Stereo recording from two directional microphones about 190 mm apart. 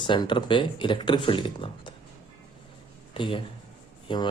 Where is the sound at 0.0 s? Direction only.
25° left (ahead or behind).